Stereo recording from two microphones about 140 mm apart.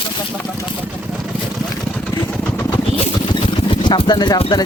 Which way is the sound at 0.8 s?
5° right (ahead or behind).